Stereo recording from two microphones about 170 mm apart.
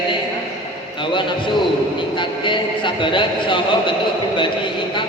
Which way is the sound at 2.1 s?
30° left (ahead or behind).